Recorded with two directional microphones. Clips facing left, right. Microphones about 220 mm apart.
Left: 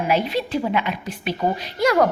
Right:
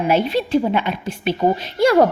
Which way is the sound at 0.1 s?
30° right (ahead or behind).